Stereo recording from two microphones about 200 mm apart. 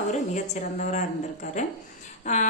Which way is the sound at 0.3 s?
40° left (ahead or behind).